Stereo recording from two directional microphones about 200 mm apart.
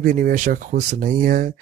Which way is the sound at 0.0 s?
40° right (ahead or behind).